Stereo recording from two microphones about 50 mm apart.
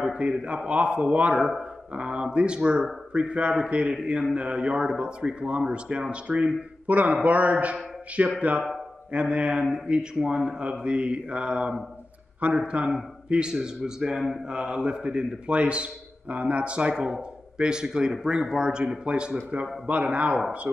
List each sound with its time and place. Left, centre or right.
0.0 s a man's voice: centre
14.5 s speech: centre